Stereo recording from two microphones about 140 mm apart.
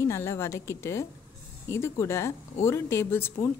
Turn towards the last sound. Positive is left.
turn(degrees=20)  # may be behind; listen again after turning